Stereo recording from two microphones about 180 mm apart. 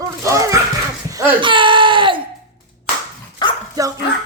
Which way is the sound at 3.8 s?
20° right (ahead or behind).